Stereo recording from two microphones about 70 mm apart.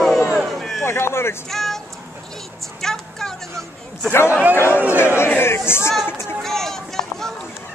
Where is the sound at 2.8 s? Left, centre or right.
Centre.